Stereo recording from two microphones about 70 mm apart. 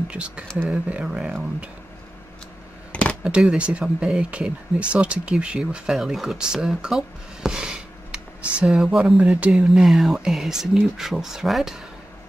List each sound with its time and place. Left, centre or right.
0.1 s speech: centre
2.9 s a sound: centre
3.3 s speech: centre
8.6 s speech: centre
9.8 s speech: centre